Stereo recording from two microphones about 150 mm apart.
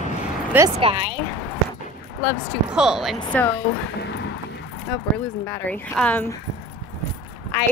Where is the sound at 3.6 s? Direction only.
70° left (ahead or behind).